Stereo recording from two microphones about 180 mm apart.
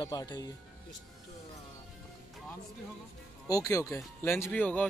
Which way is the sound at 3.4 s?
20° left (ahead or behind).